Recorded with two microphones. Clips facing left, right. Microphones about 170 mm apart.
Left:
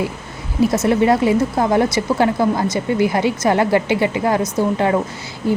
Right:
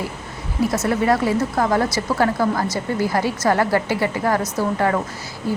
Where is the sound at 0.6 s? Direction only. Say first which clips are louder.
Left 5 dB; 25° left (ahead or behind).